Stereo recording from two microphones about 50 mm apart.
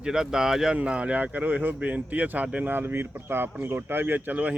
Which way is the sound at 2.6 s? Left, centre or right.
Right.